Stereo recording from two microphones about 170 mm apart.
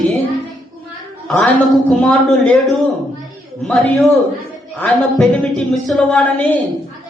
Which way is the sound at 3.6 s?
5° left (ahead or behind).